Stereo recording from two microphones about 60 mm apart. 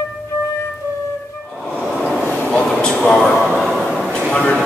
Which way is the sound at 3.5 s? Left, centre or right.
Centre.